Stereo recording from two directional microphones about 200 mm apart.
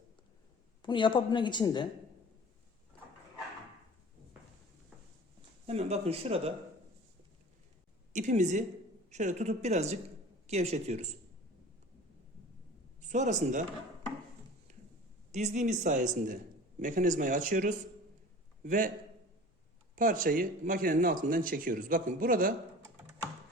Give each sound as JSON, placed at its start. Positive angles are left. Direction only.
{"t": 0.8, "sound": "a woman's voice", "side_deg": 25}
{"t": 5.6, "sound": "speech", "side_deg": -30}
{"t": 8.1, "sound": "speech", "side_deg": -35}
{"t": 13.1, "sound": "speech", "side_deg": -40}
{"t": 15.3, "sound": "a man's voice", "side_deg": -35}
{"t": 20.0, "sound": "speech", "side_deg": -45}